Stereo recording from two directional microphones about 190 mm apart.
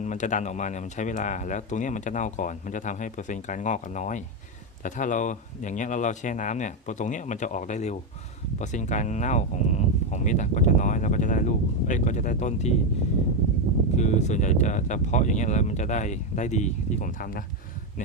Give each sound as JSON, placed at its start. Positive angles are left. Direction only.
{"t": 0.0, "sound": "speech", "side_deg": 40}
{"t": 13.9, "sound": "speech", "side_deg": 40}